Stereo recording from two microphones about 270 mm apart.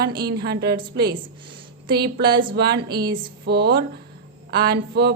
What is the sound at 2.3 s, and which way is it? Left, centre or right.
Speech, centre.